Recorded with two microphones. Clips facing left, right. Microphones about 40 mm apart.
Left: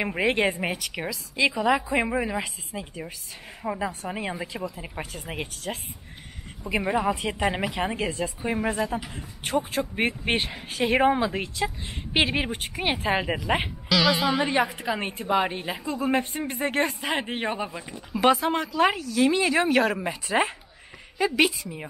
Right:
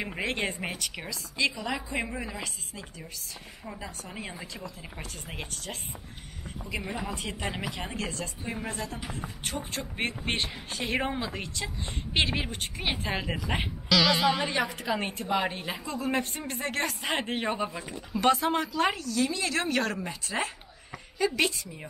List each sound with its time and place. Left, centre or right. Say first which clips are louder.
0.0 s speech: left 7 dB; left
0.7 s a woman's voice: left 4 dB; centre
1.3 s a woman's voice: left 7 dB; centre
3.6 s speech: left 12 dB; left
6.7 s a woman's voice: left 10 dB; left; by 16.9 s centre
17.0 s a woman's voice: left 2 dB; centre
19.2 s a woman's voice: left 10 dB; left